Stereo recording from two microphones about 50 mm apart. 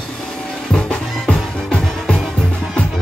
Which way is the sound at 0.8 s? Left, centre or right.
Left.